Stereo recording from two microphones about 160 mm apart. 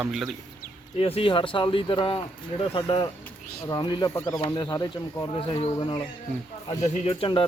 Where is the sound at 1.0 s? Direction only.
35° left (ahead or behind).